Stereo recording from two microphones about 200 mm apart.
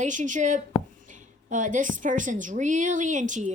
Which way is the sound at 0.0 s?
40° right (ahead or behind).